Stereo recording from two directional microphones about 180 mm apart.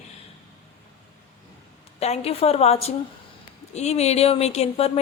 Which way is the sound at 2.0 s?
35° left (ahead or behind).